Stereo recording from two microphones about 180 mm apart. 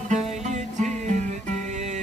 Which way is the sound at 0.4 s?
40° right (ahead or behind).